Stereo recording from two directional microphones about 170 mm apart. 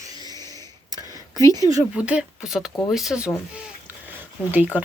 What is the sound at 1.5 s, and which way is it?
Speech, 20° right (ahead or behind).